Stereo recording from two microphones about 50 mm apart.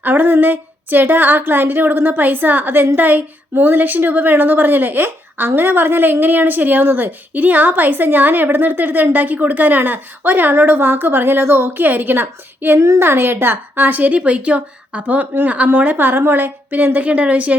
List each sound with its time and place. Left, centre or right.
0.0 s a woman's voice: right